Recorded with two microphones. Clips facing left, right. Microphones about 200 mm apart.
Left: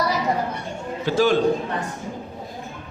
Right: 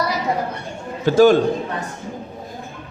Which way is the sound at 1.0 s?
45° right (ahead or behind).